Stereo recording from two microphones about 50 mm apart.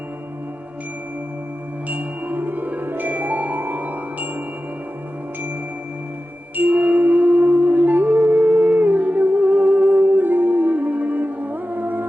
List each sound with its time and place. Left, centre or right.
1.9 s music: right
6.6 s music: right